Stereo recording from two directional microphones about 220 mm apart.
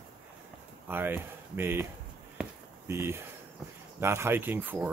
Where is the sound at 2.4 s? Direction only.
5° right (ahead or behind).